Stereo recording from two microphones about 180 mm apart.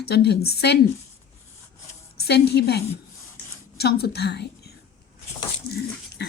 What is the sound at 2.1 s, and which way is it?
A woman's voice, 65° left (ahead or behind).